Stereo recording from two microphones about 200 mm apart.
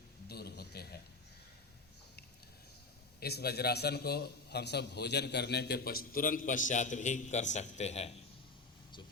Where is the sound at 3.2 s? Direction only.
55° left (ahead or behind); by 8.1 s 35° left (ahead or behind).